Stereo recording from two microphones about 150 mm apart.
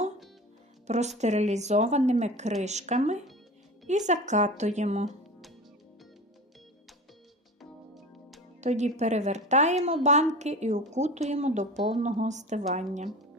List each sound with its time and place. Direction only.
0.9 s a woman's voice: 50° right (ahead or behind)
7.6 s music: centre (ahead or behind)
8.6 s a woman's voice: 50° right (ahead or behind)